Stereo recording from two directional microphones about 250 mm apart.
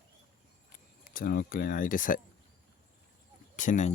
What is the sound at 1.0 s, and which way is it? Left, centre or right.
Speech, left.